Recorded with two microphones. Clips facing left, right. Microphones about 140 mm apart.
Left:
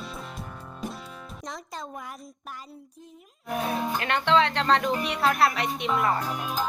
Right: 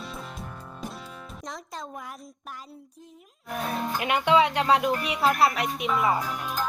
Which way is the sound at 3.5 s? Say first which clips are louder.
Left 2 dB; centre (ahead or behind).